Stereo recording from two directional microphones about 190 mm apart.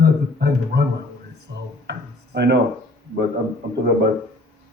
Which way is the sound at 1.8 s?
60° right (ahead or behind).